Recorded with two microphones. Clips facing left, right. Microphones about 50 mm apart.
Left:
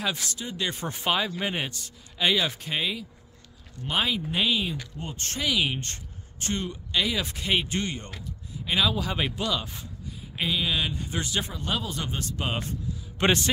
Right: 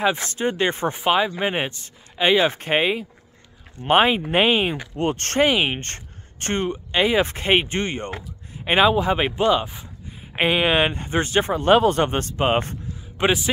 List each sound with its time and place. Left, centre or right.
0.0 s speech: right
4.9 s speech: right
5.5 s speech: right
8.9 s speech: right
10.3 s speech: right
13.2 s speech: centre